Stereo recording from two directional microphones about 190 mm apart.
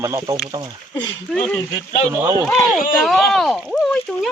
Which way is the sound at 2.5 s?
Centre (ahead or behind).